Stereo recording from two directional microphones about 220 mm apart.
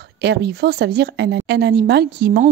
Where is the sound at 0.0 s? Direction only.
50° right (ahead or behind).